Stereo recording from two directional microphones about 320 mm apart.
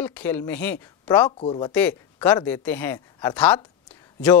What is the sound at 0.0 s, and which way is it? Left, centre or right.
Speech, centre.